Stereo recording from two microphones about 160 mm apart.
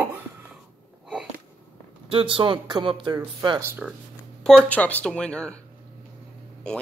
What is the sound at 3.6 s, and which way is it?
Speech, 15° right (ahead or behind).